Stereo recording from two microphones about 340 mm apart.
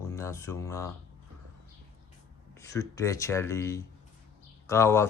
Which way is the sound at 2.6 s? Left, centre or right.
Centre.